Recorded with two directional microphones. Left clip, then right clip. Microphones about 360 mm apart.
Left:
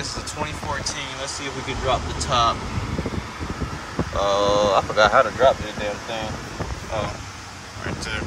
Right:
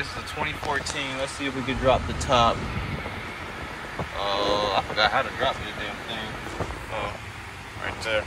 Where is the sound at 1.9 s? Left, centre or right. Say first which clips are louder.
Right 1 dB; centre.